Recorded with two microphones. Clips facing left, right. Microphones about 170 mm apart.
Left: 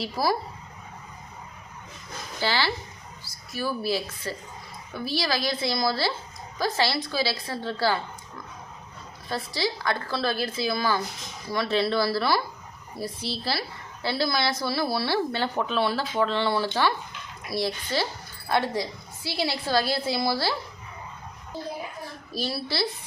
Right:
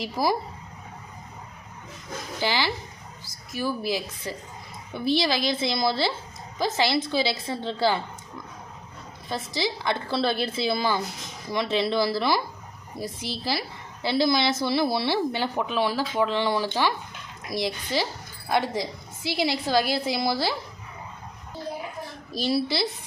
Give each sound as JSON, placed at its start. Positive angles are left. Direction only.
{"t": 0.0, "sound": "a woman's voice", "side_deg": -20}
{"t": 2.4, "sound": "a woman's voice", "side_deg": -15}
{"t": 9.3, "sound": "a woman's voice", "side_deg": -20}
{"t": 22.4, "sound": "a woman's voice", "side_deg": -20}